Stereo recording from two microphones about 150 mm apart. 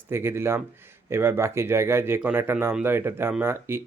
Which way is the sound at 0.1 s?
15° right (ahead or behind).